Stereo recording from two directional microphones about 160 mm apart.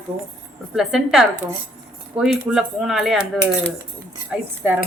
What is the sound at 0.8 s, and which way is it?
Cutlery, centre (ahead or behind).